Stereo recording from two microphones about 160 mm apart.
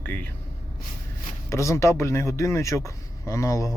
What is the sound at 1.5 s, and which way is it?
Speech, 15° left (ahead or behind).